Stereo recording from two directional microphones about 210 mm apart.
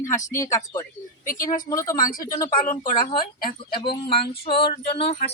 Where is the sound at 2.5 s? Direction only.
40° left (ahead or behind).